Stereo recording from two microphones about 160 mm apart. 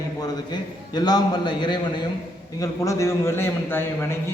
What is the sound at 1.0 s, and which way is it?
A man's voice, 25° left (ahead or behind).